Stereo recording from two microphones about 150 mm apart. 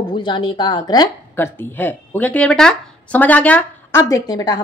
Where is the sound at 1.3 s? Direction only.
15° left (ahead or behind).